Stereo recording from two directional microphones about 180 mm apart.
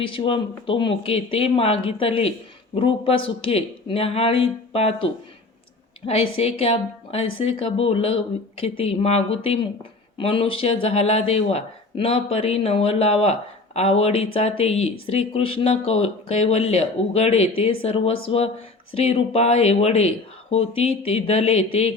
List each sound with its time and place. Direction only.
0.0 s speech: 30° left (ahead or behind)
6.1 s speech: 35° left (ahead or behind)